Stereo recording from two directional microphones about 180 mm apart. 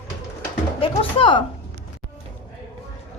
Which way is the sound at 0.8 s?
30° left (ahead or behind).